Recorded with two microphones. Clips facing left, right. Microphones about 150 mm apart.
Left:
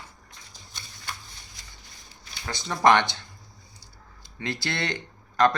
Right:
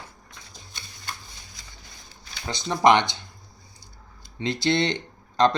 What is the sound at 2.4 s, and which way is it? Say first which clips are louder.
Speech: right 2 dB; 20° right (ahead or behind).